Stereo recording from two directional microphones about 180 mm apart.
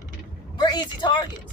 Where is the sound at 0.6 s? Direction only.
25° left (ahead or behind).